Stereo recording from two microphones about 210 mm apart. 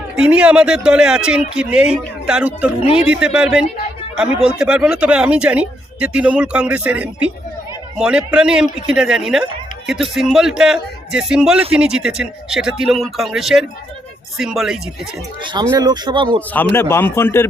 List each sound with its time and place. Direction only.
0.2 s speech: 5° right (ahead or behind)
15.7 s speech: 20° right (ahead or behind)
16.7 s a man's voice: 10° left (ahead or behind)